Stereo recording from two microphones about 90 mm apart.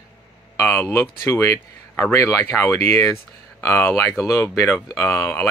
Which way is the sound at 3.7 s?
30° left (ahead or behind).